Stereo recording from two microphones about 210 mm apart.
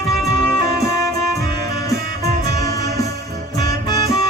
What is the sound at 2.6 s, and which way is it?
Music, 15° left (ahead or behind).